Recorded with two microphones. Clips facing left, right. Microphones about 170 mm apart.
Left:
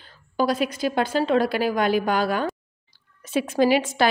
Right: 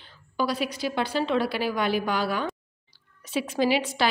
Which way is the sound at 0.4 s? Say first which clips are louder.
Left 5 dB; 50° left (ahead or behind).